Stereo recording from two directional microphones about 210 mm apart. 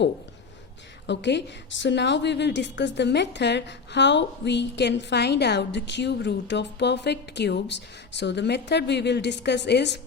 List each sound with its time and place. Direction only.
1.0 s a woman's voice: 55° left (ahead or behind)